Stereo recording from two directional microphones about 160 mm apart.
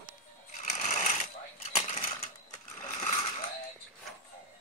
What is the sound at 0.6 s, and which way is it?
Sewing machine, 50° left (ahead or behind).